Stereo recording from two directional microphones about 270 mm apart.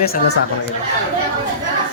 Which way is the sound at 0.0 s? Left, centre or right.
Left.